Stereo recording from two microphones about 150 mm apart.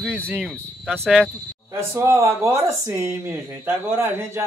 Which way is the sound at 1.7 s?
15° right (ahead or behind).